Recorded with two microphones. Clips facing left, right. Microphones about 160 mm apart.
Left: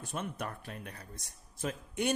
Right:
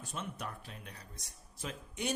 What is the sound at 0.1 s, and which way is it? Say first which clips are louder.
A man's voice: left 4 dB; 55° left (ahead or behind).